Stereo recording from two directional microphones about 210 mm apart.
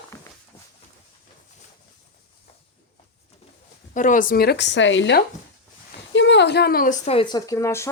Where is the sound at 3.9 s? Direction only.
40° left (ahead or behind).